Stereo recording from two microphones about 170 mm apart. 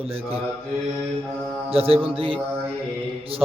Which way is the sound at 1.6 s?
35° right (ahead or behind).